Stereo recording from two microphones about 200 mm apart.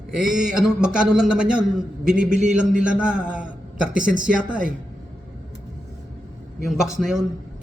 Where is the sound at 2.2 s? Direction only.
35° right (ahead or behind).